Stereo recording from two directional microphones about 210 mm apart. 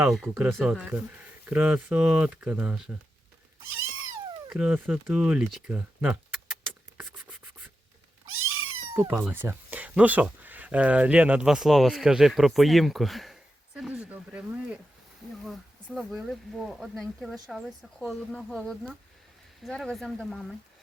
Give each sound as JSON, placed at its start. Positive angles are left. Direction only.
{"t": 0.0, "sound": "speech", "side_deg": -5}
{"t": 3.8, "sound": "cat", "side_deg": -75}
{"t": 4.4, "sound": "speech", "side_deg": -5}
{"t": 6.9, "sound": "a sound", "side_deg": -10}
{"t": 8.3, "sound": "cat", "side_deg": -75}
{"t": 8.9, "sound": "speech", "side_deg": -10}